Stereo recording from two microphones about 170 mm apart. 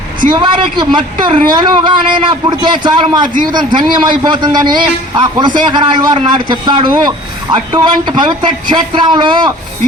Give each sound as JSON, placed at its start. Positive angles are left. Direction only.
{"t": 0.3, "sound": "a man's voice", "side_deg": -25}